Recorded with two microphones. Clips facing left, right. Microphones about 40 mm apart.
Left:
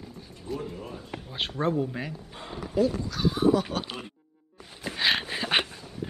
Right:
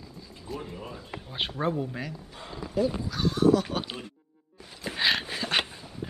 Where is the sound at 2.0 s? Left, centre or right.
Left.